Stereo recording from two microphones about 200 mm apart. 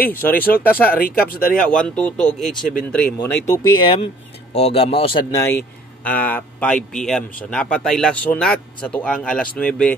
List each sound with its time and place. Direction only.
0.0 s speech: 10° left (ahead or behind)
0.8 s speech: 50° left (ahead or behind)
1.6 s speech: 5° left (ahead or behind)
3.8 s speech: 25° left (ahead or behind)
6.0 s speech: 10° left (ahead or behind)